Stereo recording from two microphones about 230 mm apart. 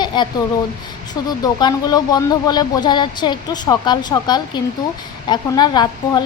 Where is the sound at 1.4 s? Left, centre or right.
Centre.